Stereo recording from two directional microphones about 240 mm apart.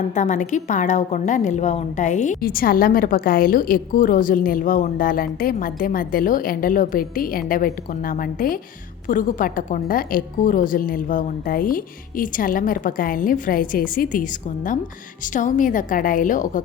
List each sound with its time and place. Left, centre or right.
0.1 s a woman's voice: left